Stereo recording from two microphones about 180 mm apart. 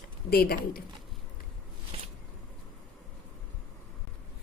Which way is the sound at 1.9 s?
30° right (ahead or behind).